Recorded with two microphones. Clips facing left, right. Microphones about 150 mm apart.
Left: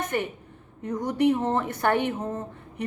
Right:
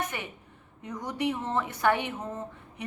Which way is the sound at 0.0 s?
50° left (ahead or behind).